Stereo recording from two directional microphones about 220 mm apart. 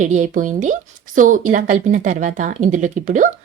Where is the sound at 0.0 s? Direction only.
35° right (ahead or behind).